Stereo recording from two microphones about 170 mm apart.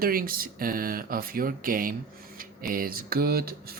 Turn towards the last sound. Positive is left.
turn(degrees=-65)  # may be behind; listen again after turning